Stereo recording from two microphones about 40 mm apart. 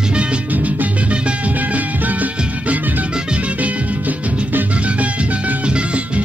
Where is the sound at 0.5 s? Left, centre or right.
Right.